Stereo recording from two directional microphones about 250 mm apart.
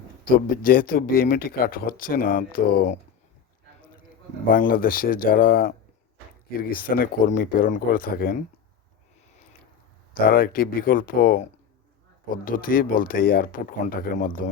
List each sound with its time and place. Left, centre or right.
0.3 s speech: left
4.4 s speech: left
10.2 s speech: left